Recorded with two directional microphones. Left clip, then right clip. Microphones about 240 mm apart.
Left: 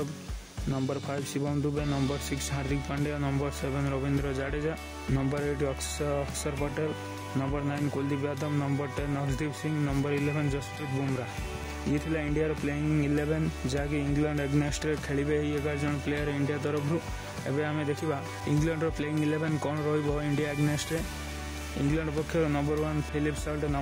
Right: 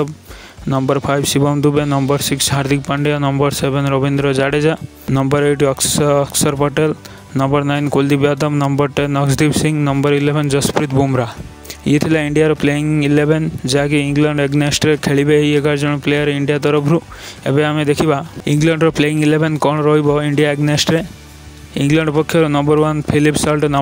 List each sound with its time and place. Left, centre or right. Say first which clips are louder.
0.7 s speech: right 17 dB; right
11.9 s speech: right 17 dB; right